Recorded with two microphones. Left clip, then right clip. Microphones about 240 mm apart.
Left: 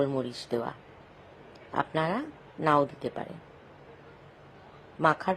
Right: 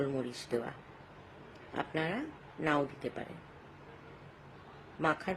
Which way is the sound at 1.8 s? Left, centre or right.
Centre.